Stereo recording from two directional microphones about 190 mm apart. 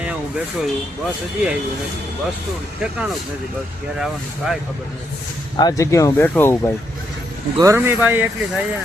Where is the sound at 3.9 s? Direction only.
5° right (ahead or behind).